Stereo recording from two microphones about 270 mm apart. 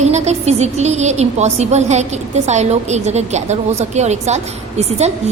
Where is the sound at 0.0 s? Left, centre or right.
Right.